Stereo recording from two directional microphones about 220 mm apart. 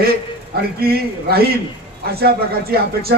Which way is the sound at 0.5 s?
45° right (ahead or behind).